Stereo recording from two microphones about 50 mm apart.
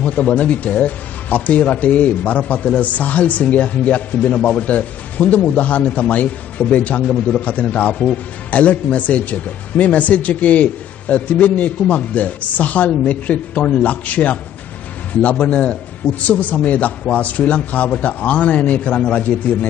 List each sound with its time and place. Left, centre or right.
0.0 s a man's voice: left